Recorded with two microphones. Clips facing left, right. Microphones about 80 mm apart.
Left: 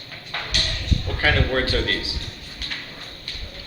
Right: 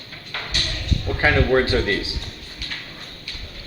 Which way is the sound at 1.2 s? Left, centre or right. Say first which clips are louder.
Right 4 dB; right.